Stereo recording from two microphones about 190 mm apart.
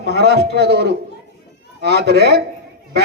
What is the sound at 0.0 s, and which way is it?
Speech, 60° right (ahead or behind).